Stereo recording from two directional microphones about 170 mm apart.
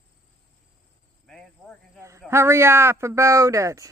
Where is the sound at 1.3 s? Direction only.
5° left (ahead or behind).